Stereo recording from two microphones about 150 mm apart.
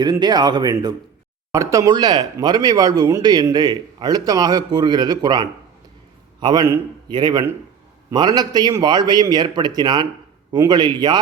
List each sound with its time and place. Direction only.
0.0 s speech: 30° right (ahead or behind)